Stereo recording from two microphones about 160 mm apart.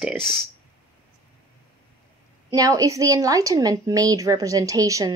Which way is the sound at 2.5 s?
20° right (ahead or behind).